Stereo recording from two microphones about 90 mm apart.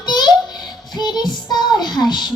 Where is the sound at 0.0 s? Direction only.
50° left (ahead or behind).